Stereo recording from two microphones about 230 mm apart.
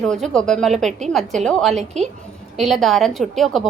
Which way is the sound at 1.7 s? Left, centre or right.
Right.